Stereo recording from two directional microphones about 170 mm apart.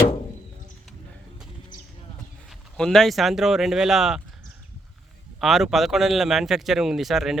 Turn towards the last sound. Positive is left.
turn(degrees=0)  # may be behind; listen again after turning